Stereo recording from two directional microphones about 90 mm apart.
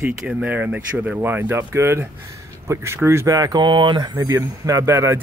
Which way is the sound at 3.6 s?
60° right (ahead or behind).